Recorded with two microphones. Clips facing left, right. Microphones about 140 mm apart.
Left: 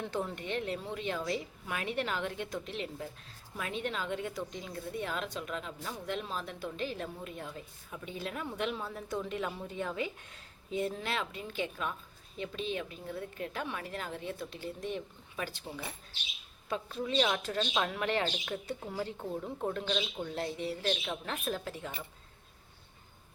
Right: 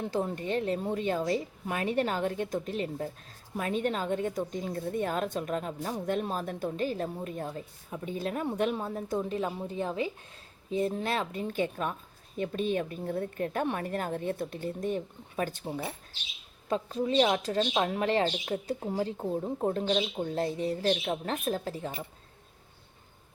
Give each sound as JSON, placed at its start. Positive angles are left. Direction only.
{"t": 0.0, "sound": "a woman's voice", "side_deg": -35}
{"t": 16.6, "sound": "a woman's voice", "side_deg": -35}